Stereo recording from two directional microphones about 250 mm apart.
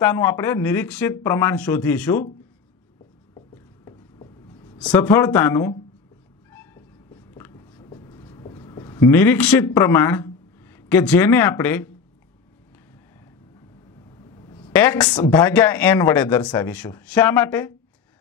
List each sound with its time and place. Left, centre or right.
0.0 s speech: centre
3.5 s a sound: centre
4.7 s speech: centre
6.5 s writing: centre
14.3 s a sound: centre
14.7 s a woman's voice: centre